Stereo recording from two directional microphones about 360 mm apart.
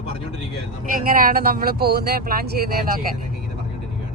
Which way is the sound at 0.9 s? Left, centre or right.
Right.